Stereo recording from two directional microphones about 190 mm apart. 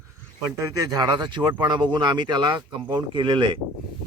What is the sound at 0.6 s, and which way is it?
Speech, 20° right (ahead or behind).